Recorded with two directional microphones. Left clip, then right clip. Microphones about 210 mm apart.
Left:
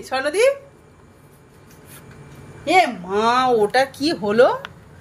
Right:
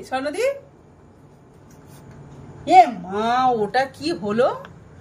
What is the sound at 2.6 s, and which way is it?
Speech, 25° left (ahead or behind).